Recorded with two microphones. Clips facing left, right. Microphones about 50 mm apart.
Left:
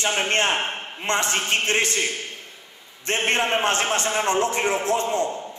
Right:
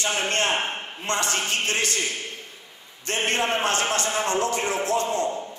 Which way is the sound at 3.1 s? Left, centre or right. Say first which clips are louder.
Left 2 dB; left.